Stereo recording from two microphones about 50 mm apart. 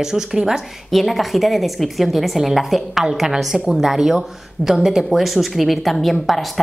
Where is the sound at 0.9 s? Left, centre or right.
Centre.